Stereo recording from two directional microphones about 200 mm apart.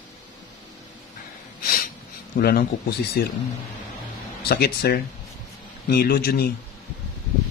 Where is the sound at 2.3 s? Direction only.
50° left (ahead or behind).